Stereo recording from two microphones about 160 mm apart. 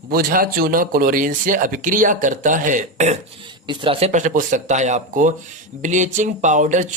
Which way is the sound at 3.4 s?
30° right (ahead or behind).